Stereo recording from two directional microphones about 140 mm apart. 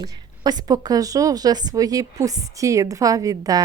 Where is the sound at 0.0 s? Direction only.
30° right (ahead or behind).